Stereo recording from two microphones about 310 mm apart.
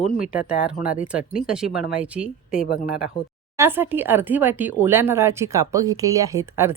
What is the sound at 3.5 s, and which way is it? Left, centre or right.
Speech, centre.